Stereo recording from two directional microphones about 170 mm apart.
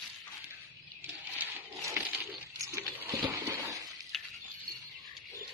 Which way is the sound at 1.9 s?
10° right (ahead or behind).